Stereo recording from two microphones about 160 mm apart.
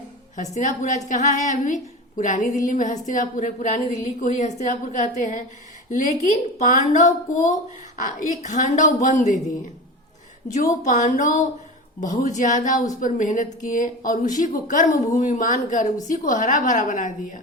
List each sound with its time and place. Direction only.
0.3 s a woman's voice: 50° left (ahead or behind)
6.6 s a woman's voice: 50° left (ahead or behind)
10.5 s a woman's voice: 50° left (ahead or behind)